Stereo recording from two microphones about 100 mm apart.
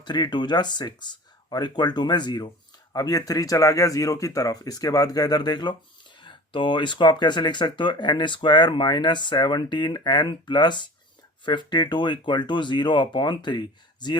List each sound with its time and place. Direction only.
0.0 s speech: 45° left (ahead or behind)